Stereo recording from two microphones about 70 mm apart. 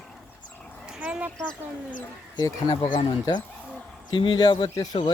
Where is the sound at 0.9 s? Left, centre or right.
Centre.